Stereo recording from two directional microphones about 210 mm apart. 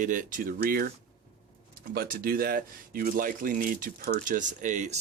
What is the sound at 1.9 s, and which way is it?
Speech, 45° right (ahead or behind).